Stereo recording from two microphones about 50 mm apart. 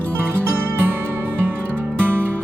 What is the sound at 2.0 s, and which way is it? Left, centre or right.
Music, right.